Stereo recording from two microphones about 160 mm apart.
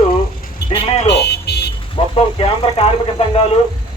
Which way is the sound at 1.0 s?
90° left.